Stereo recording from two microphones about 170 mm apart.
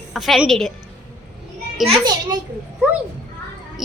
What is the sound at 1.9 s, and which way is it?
Speech, 25° right (ahead or behind).